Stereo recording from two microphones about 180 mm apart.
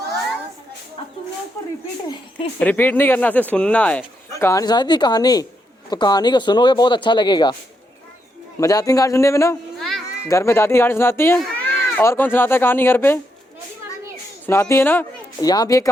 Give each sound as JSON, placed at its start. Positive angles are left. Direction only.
{"t": 2.6, "sound": "speech", "side_deg": 10}
{"t": 8.6, "sound": "speech", "side_deg": 20}
{"t": 9.7, "sound": "a sound", "side_deg": 0}
{"t": 10.2, "sound": "speech", "side_deg": 15}
{"t": 14.4, "sound": "speech", "side_deg": 15}